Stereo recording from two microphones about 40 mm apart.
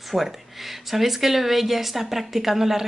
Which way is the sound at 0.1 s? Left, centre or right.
Centre.